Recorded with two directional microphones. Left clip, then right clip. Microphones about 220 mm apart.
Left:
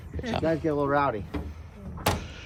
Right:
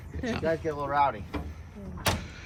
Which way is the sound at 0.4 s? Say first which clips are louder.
Left 4 dB; 45° left (ahead or behind).